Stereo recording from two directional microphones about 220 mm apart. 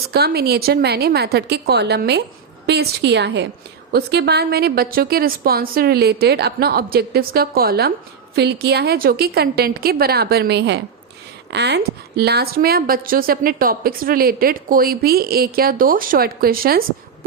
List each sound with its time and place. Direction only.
0.1 s a woman's voice: 45° right (ahead or behind)